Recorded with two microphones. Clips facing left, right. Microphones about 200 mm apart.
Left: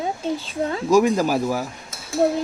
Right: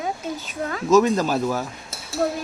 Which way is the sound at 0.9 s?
10° left (ahead or behind).